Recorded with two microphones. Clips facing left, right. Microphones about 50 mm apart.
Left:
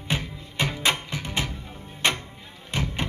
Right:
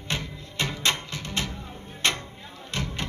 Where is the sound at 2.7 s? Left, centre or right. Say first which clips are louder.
Left 3 dB; centre.